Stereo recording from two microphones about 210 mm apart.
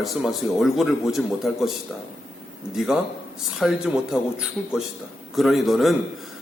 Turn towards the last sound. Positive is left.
turn(degrees=0)  # may be behind; listen again after turning